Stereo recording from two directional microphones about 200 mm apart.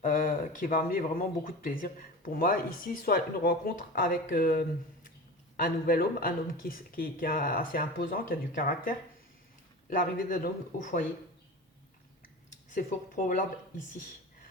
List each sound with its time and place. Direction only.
0.0 s speech: 45° left (ahead or behind)
9.9 s speech: 40° left (ahead or behind)
12.7 s speech: 40° left (ahead or behind)